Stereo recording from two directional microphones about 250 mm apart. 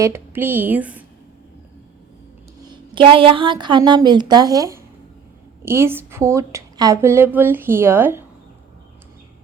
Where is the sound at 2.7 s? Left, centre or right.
Centre.